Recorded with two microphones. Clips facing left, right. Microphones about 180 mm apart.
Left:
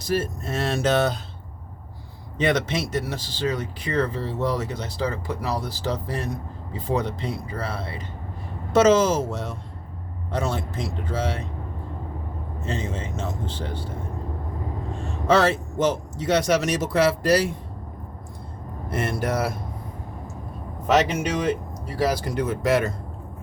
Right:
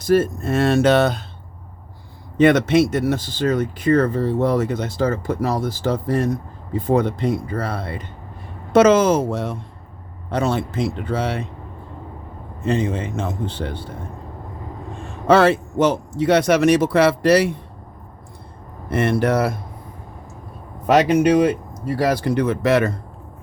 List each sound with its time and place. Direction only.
0.1 s speech: 55° right (ahead or behind)
2.4 s speech: 55° right (ahead or behind)
12.6 s speech: 60° right (ahead or behind)
15.3 s speech: 60° right (ahead or behind)
18.9 s speech: 65° right (ahead or behind)
20.8 s speech: 60° right (ahead or behind)